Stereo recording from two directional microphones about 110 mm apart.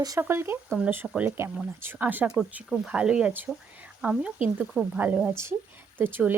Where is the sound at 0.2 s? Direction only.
20° right (ahead or behind).